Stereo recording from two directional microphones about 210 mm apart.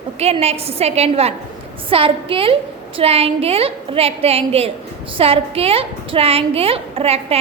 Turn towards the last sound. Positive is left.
turn(degrees=-30)  # may be behind; listen again after turning